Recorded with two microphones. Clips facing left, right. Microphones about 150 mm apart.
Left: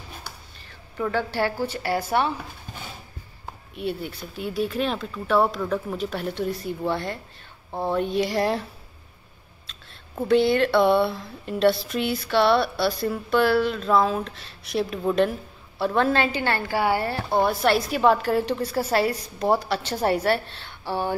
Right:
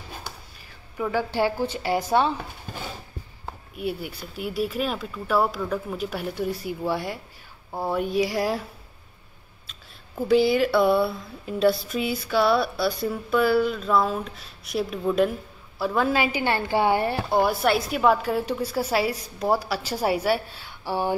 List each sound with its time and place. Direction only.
0.6 s a sound: 5° right (ahead or behind)
1.3 s a woman's voice: 15° right (ahead or behind)
3.7 s a woman's voice: 5° right (ahead or behind)
10.2 s a woman's voice: 5° right (ahead or behind)